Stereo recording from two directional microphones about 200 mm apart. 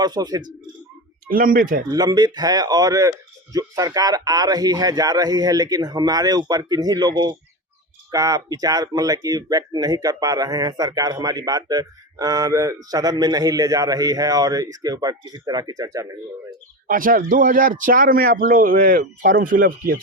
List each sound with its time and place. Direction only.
0.0 s speech: 20° right (ahead or behind)
1.3 s speech: 45° right (ahead or behind)
1.9 s speech: 20° right (ahead or behind)
16.8 s speech: 45° right (ahead or behind)